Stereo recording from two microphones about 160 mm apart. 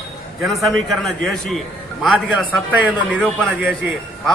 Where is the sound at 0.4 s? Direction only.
Centre (ahead or behind).